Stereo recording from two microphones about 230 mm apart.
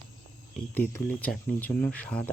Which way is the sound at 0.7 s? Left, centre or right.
Centre.